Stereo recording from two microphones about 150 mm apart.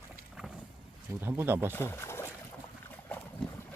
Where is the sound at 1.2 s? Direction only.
15° right (ahead or behind).